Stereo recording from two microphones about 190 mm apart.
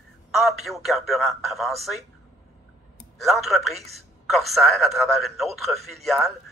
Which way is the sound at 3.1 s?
Centre (ahead or behind).